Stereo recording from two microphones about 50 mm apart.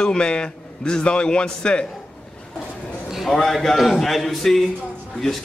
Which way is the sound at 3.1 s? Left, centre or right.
Centre.